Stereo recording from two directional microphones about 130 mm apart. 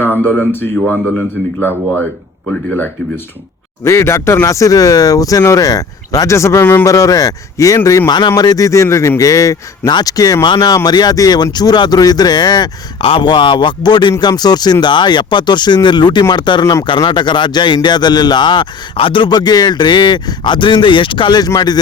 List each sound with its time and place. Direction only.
0.0 s speech: 15° left (ahead or behind)
2.5 s speech: 10° left (ahead or behind)
3.8 s speech: 20° left (ahead or behind)